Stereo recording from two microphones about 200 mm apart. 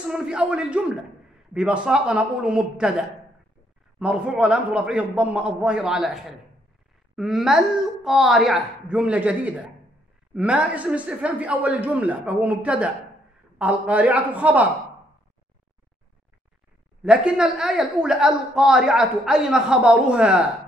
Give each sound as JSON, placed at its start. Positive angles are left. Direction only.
{"t": 0.1, "sound": "a woman's voice", "side_deg": -5}
{"t": 4.0, "sound": "a woman's voice", "side_deg": -5}
{"t": 17.0, "sound": "a woman's voice", "side_deg": -5}